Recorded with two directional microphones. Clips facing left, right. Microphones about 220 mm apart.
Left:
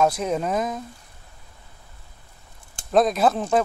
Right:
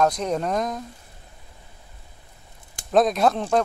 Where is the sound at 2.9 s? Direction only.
Centre (ahead or behind).